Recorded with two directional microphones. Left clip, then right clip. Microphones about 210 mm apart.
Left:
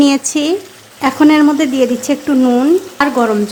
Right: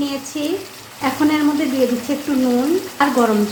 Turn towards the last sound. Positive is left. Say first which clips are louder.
# left 3 dB
turn(degrees=30)  # may be behind; listen again after turning